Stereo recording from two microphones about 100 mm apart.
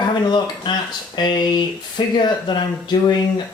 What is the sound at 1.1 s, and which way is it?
Speech, 45° left (ahead or behind).